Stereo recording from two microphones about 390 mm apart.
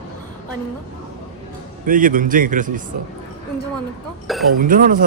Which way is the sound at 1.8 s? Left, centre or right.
Right.